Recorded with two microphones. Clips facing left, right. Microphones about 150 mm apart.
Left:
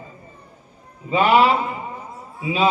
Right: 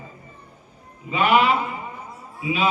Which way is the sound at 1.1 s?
35° left (ahead or behind).